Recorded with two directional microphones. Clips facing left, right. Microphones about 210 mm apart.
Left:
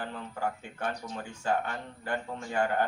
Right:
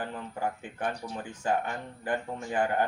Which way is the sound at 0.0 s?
15° right (ahead or behind).